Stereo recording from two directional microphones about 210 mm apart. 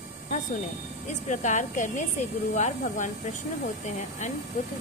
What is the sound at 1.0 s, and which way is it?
Speech, 35° left (ahead or behind).